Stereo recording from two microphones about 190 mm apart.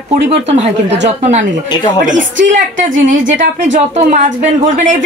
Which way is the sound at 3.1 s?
45° right (ahead or behind).